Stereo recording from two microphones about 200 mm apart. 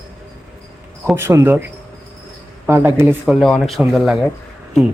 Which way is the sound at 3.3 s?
Centre (ahead or behind).